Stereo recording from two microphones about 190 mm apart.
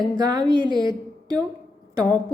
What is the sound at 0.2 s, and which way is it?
Speech, 20° right (ahead or behind).